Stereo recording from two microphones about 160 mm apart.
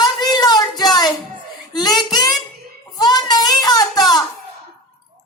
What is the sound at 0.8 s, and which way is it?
Music, 25° left (ahead or behind).